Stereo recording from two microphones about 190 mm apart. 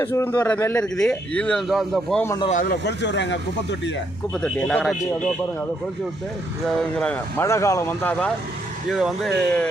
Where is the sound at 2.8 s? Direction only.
65° left (ahead or behind).